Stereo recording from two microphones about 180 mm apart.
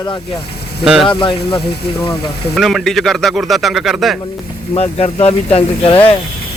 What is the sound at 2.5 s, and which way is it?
Speech, centre (ahead or behind).